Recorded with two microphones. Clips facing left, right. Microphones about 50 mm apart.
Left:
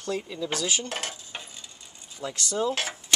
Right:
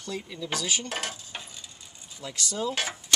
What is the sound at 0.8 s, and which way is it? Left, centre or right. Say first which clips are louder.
Cutlery: even; centre.